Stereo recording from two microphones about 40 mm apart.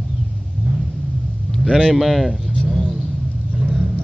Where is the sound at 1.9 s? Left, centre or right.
Centre.